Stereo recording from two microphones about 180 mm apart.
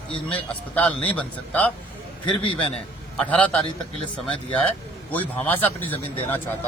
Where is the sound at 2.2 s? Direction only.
30° left (ahead or behind).